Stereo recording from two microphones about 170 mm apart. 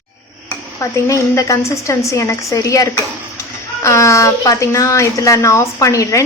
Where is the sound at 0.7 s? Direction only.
20° left (ahead or behind).